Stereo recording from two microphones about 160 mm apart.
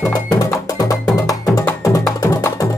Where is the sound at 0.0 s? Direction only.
20° left (ahead or behind).